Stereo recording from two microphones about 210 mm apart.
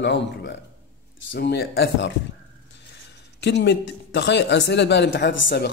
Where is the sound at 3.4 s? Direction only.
55° left (ahead or behind).